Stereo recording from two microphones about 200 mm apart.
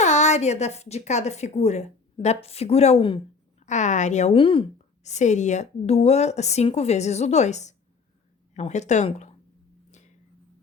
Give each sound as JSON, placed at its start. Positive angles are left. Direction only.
{"t": 0.0, "sound": "a woman's voice", "side_deg": 35}